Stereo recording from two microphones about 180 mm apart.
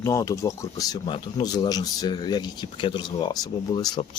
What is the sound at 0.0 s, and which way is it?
Speech, 15° left (ahead or behind).